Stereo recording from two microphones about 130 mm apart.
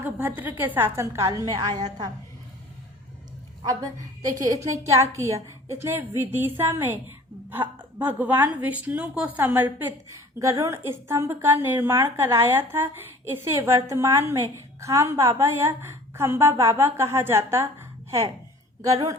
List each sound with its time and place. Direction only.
0.0 s a woman's voice: 15° right (ahead or behind); by 2.0 s 30° right (ahead or behind)
3.6 s a woman's voice: 30° right (ahead or behind)